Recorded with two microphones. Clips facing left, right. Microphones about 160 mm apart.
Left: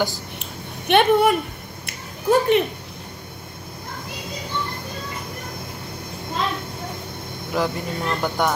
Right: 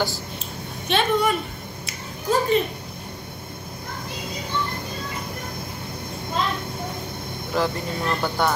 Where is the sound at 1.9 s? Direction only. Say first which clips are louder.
Left 5 dB; 60° left (ahead or behind).